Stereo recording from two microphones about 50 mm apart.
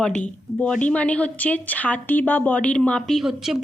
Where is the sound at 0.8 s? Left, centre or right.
Left.